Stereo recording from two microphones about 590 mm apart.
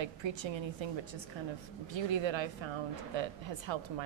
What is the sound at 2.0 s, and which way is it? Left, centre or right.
A woman's voice, right.